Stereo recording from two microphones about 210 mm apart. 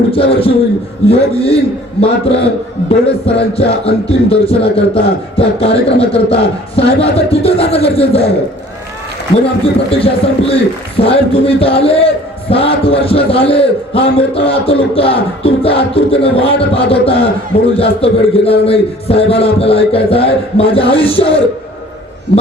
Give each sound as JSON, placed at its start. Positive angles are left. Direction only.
{"t": 0.1, "sound": "a sound", "side_deg": 25}
{"t": 1.0, "sound": "a man's voice", "side_deg": 25}
{"t": 9.9, "sound": "a man's voice", "side_deg": 25}